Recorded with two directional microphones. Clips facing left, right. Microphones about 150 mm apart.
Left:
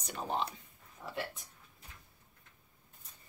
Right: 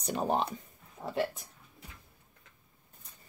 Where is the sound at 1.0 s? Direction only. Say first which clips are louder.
Right 8 dB; 35° right (ahead or behind).